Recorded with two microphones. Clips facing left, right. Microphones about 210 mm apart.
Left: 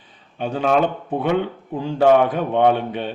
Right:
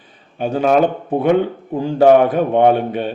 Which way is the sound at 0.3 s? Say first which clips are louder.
Right 4 dB; 45° right (ahead or behind).